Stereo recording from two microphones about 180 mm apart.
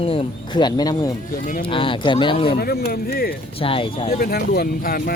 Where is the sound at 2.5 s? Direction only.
60° left (ahead or behind).